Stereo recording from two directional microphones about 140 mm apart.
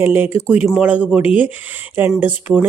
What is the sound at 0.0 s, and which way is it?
Speech, 15° right (ahead or behind).